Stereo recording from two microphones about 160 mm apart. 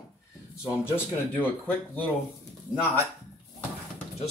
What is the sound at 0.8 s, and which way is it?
Speech, 15° left (ahead or behind).